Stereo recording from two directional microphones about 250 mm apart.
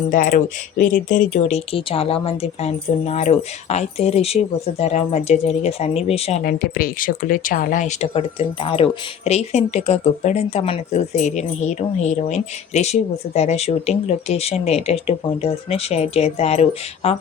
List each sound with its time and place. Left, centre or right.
0.1 s speech: left
6.4 s speech: left